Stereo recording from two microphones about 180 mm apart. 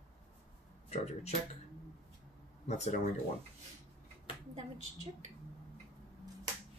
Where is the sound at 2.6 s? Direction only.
40° left (ahead or behind).